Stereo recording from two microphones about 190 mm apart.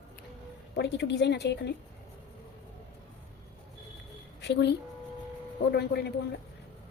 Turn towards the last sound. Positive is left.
turn(degrees=60)  # may be behind; listen again after turning